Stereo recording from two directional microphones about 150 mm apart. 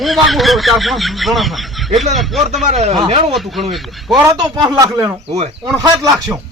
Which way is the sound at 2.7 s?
45° right (ahead or behind).